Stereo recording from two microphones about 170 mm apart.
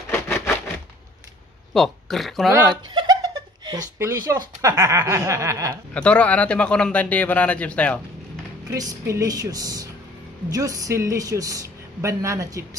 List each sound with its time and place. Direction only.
0.1 s a sound: 15° left (ahead or behind)
1.7 s speech: centre (ahead or behind)
2.7 s speech: 25° right (ahead or behind)
5.9 s a man's voice: 5° left (ahead or behind)
8.7 s a woman's voice: 20° right (ahead or behind)